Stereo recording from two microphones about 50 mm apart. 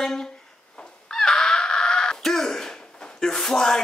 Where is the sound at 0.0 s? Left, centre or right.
Centre.